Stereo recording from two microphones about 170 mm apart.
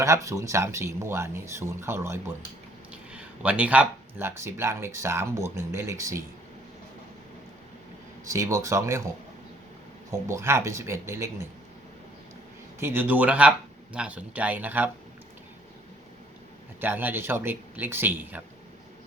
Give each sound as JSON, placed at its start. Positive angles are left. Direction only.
{"t": 0.0, "sound": "speech", "side_deg": -20}
{"t": 8.3, "sound": "speech", "side_deg": -20}
{"t": 10.1, "sound": "speech", "side_deg": -15}
{"t": 12.8, "sound": "speech", "side_deg": -10}
{"t": 16.8, "sound": "speech", "side_deg": -10}